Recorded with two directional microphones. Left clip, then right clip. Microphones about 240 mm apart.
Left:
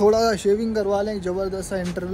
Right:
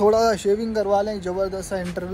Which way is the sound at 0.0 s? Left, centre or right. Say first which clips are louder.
Even; centre.